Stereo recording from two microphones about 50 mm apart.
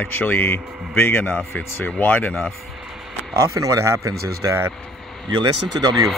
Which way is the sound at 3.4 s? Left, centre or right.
Right.